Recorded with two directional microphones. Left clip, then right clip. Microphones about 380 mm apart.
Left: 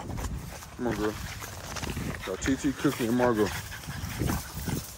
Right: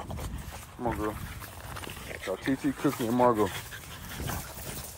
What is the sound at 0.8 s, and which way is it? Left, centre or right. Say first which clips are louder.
Speech: even; centre.